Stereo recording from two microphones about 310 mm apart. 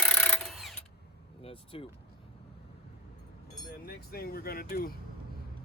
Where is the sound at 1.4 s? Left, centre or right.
Centre.